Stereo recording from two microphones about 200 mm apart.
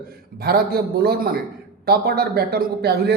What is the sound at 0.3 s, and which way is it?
A man's voice, 50° right (ahead or behind).